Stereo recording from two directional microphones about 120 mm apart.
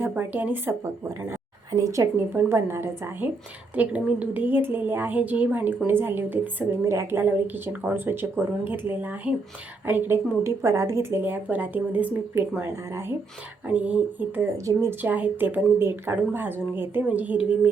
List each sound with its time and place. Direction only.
0.1 s a woman's voice: 15° right (ahead or behind)
13.7 s a woman's voice: 10° right (ahead or behind)